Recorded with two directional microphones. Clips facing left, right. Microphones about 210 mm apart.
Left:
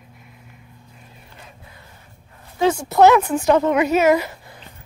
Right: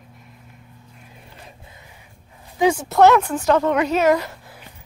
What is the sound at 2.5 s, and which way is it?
A woman's voice, 10° right (ahead or behind).